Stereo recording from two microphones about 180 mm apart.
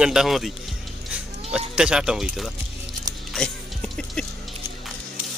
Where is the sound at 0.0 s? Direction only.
5° right (ahead or behind).